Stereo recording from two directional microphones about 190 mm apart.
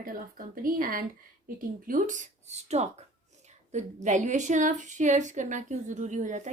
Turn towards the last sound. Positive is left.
turn(degrees=-40)  # may be behind; listen again after turning